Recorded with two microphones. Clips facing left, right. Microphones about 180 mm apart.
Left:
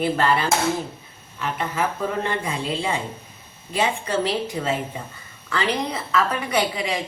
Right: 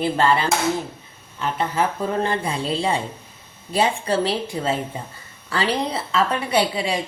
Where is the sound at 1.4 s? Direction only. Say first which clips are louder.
Right 3 dB; 30° right (ahead or behind).